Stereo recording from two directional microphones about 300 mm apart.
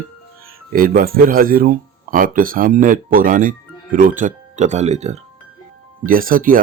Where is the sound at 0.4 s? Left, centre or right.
Right.